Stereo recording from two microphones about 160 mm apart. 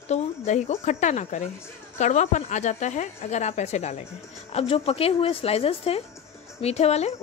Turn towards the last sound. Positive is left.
turn(degrees=40)  # may be behind; listen again after turning